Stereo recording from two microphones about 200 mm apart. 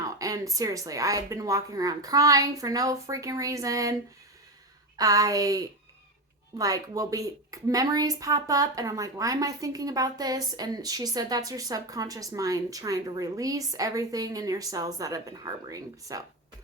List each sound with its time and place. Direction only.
0.0 s a woman's voice: 15° right (ahead or behind)
4.9 s a woman's voice: 15° right (ahead or behind)